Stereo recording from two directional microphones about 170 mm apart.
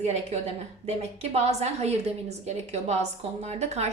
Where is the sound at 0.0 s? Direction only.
40° right (ahead or behind).